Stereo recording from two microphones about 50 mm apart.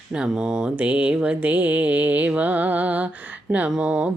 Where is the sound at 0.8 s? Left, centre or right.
Right.